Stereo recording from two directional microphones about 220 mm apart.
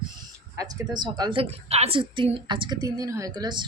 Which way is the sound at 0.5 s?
15° right (ahead or behind).